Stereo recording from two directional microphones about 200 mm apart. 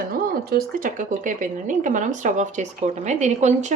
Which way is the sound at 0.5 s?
40° right (ahead or behind).